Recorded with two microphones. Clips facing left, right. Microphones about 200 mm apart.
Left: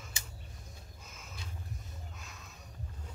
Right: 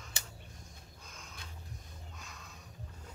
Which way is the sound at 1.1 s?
5° left (ahead or behind).